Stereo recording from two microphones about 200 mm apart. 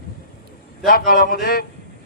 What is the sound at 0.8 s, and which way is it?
Speech, 45° left (ahead or behind).